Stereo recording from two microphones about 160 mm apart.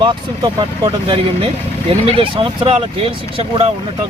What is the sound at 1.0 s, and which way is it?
Speech, 35° right (ahead or behind).